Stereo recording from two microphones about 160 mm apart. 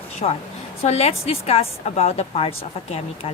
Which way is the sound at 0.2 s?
45° left (ahead or behind).